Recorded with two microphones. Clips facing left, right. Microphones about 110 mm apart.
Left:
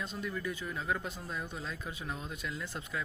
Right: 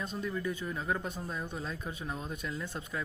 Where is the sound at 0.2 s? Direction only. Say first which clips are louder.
Right 3 dB; 25° right (ahead or behind).